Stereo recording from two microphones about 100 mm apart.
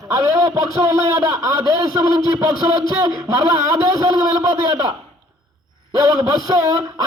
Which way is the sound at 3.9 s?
35° right (ahead or behind).